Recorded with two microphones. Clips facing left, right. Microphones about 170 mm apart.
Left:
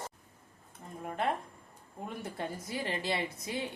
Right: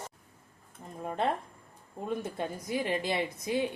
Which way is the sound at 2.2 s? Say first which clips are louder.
Right 3 dB; 20° right (ahead or behind).